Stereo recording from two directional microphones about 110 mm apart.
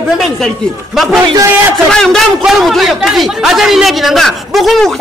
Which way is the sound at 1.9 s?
5° left (ahead or behind).